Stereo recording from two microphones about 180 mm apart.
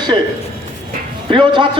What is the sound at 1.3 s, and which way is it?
Speech, 25° right (ahead or behind).